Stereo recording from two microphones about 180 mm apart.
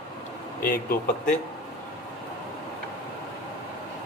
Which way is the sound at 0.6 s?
55° left (ahead or behind).